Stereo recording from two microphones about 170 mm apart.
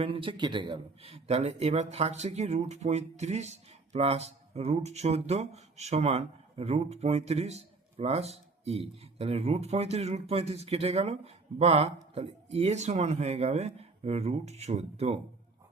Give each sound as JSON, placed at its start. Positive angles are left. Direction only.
{"t": 0.0, "sound": "speech", "side_deg": -30}